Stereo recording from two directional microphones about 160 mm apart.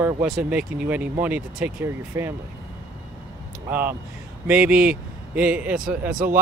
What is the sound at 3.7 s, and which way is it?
Speech, 10° right (ahead or behind).